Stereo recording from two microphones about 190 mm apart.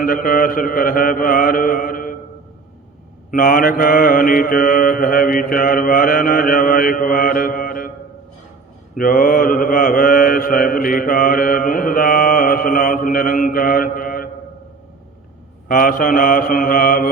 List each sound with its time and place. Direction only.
0.0 s mantra: 45° left (ahead or behind)
3.3 s mantra: 45° left (ahead or behind)
9.0 s mantra: 45° left (ahead or behind)
15.7 s mantra: 50° left (ahead or behind)